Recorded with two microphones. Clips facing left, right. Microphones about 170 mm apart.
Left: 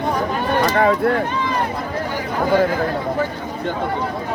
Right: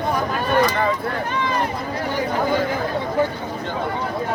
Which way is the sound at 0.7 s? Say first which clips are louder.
Left 6 dB; 65° left (ahead or behind).